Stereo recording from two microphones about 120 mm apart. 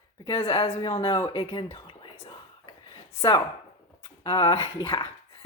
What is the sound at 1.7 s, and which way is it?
Whispering, 40° left (ahead or behind).